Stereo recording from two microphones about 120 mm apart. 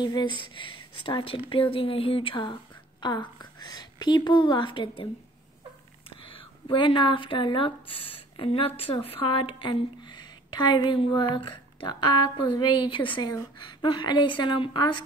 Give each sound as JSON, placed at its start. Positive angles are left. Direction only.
{"t": 0.0, "sound": "a woman's voice", "side_deg": 40}
{"t": 6.0, "sound": "a woman's voice", "side_deg": 45}